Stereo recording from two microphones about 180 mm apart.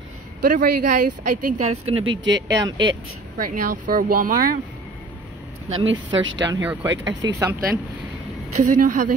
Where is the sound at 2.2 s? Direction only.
80° right.